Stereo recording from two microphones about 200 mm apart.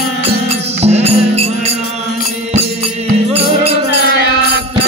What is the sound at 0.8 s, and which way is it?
Music, 30° right (ahead or behind).